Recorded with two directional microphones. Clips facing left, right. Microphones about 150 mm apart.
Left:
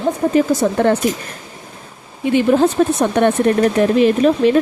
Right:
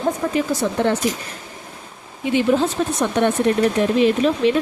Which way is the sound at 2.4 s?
55° left (ahead or behind).